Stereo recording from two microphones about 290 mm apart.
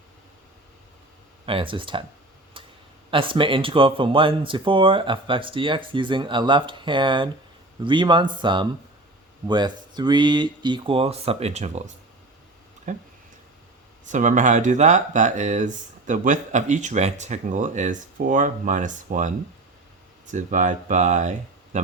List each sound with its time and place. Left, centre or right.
1.5 s speech: centre
3.1 s speech: centre
20.3 s speech: right